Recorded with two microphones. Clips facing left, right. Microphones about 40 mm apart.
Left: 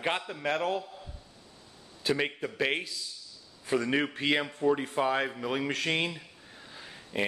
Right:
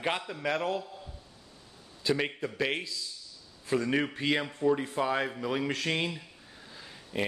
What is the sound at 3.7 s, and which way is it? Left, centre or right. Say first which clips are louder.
Speech: even; centre.